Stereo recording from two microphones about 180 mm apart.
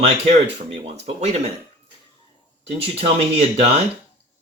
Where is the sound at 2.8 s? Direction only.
30° right (ahead or behind).